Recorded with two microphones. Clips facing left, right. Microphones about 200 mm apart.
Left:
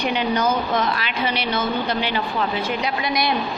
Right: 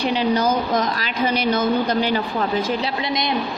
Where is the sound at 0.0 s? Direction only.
35° right (ahead or behind).